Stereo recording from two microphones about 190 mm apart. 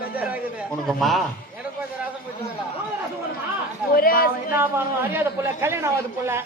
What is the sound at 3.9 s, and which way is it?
Speech, 50° left (ahead or behind).